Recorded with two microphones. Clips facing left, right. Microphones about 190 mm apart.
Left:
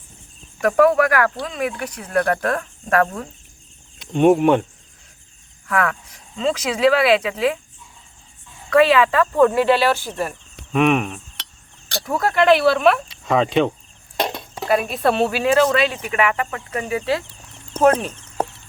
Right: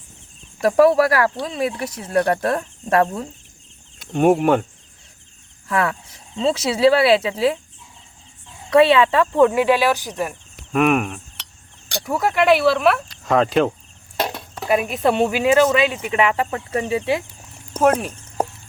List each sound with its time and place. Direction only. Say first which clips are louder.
0.6 s speech: right 1 dB; 30° right (ahead or behind)
3.9 s speech: left 1 dB; 5° right (ahead or behind)
5.6 s speech: even; 30° right (ahead or behind)
8.7 s speech: right 1 dB; 25° right (ahead or behind)
9.3 s speech: left 1 dB; 15° right (ahead or behind)
10.7 s a sound: even; centre (ahead or behind)
12.0 s speech: left 1 dB; 10° right (ahead or behind)
14.2 s a sound: left 1 dB; 5° right (ahead or behind)
14.6 s speech: even; 10° right (ahead or behind)
17.5 s chicken: left 1 dB; 10° right (ahead or behind)